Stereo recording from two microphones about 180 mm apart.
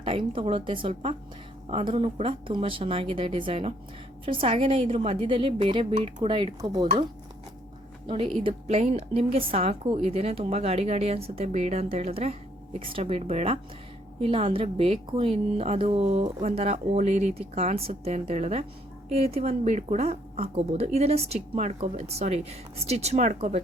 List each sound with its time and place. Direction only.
0.0 s a woman's voice: 30° right (ahead or behind)
8.0 s speech: 30° right (ahead or behind)